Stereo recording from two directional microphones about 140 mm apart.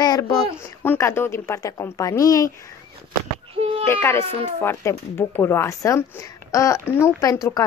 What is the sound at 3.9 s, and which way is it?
Speech, 15° left (ahead or behind).